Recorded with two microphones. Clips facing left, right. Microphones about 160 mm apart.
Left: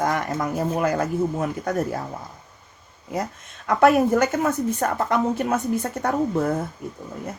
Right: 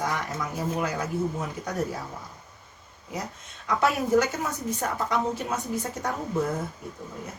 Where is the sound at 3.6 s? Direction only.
60° left (ahead or behind).